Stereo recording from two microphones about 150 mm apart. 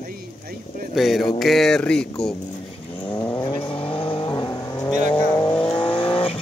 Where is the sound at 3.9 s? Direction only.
35° left (ahead or behind).